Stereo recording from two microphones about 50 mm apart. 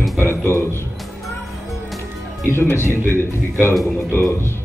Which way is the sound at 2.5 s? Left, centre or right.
Left.